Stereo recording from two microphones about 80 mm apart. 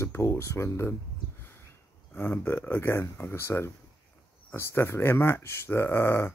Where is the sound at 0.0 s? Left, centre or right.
Left.